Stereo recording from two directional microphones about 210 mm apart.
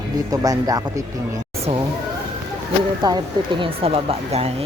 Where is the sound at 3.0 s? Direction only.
20° right (ahead or behind).